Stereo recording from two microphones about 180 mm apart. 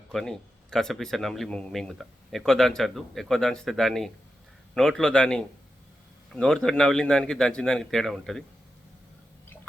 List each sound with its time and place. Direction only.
0.1 s speech: centre (ahead or behind)